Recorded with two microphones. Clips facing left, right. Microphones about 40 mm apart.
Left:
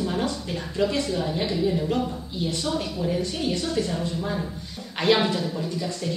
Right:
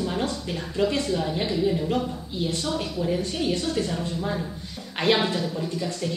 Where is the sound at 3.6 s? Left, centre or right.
Centre.